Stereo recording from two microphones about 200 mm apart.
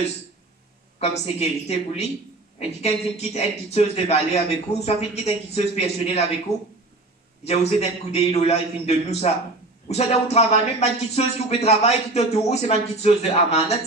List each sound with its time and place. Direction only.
0.9 s a man's voice: 30° left (ahead or behind)
7.4 s a man's voice: 30° left (ahead or behind)